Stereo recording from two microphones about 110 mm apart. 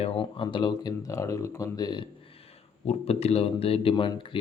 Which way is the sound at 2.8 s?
70° left (ahead or behind).